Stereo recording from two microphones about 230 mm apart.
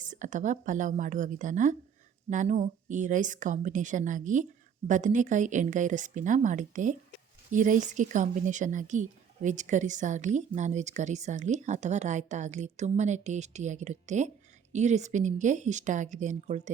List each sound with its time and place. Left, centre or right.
0.0 s speech: right